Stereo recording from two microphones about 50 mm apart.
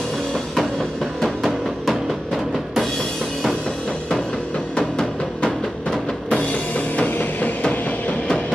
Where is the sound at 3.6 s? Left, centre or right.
Centre.